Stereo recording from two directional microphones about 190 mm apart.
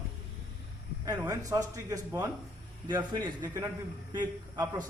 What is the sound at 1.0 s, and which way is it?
A man's voice, 20° right (ahead or behind).